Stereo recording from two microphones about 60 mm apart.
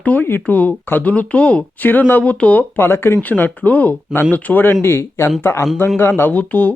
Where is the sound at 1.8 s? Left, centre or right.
Left.